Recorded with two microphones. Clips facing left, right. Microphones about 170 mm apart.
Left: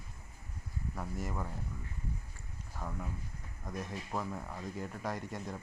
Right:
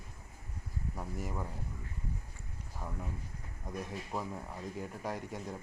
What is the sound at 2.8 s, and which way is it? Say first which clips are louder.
Speech: left 1 dB; 10° right (ahead or behind).